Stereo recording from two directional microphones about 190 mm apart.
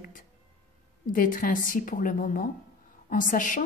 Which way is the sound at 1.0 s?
45° left (ahead or behind).